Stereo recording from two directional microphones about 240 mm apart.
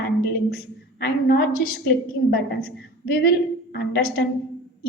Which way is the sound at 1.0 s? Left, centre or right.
Left.